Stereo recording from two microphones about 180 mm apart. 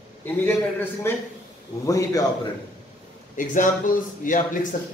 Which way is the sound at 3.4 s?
50° left (ahead or behind).